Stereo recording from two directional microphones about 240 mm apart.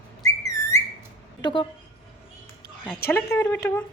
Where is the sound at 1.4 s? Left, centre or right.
Centre.